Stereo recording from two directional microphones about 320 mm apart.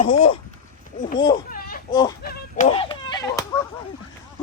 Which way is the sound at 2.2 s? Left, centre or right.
Left.